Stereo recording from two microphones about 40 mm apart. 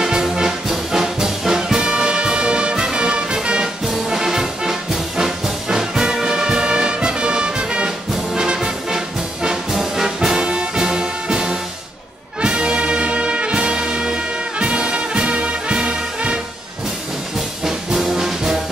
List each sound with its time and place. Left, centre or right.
0.0 s music: centre
12.4 s brass instrument: right
17.6 s music: centre